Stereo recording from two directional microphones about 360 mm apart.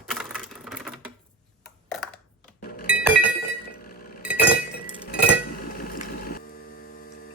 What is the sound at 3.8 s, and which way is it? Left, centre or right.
Chink, left.